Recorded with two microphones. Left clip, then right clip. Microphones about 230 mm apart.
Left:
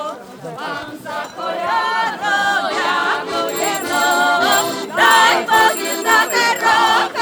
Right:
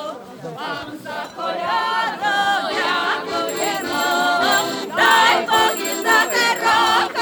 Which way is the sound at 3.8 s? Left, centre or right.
Centre.